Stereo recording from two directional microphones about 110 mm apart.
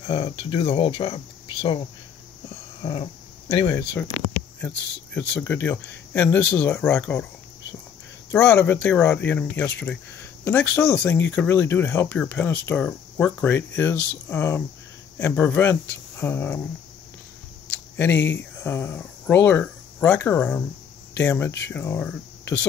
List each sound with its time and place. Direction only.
0.0 s speech: 65° left (ahead or behind)
2.8 s dog: 50° left (ahead or behind)
4.0 s speech: 15° left (ahead or behind)
8.3 s speech: 15° left (ahead or behind)
17.6 s speech: 20° left (ahead or behind)